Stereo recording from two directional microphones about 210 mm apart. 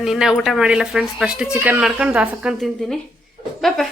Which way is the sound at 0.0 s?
Centre (ahead or behind).